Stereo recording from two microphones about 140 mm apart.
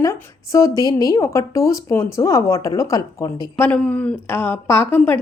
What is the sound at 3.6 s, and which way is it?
A woman's voice, 10° left (ahead or behind).